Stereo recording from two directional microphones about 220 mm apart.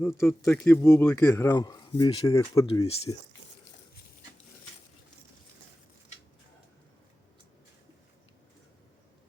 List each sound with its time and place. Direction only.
0.2 s speech: 10° left (ahead or behind)
2.8 s speech: 25° left (ahead or behind)